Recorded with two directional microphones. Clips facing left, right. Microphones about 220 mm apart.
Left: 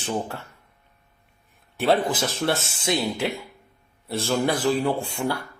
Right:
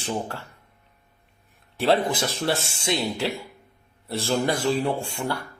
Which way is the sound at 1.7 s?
Centre (ahead or behind).